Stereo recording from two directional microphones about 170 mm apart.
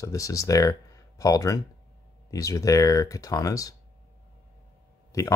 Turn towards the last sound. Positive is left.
turn(degrees=20)  # may be behind; listen again after turning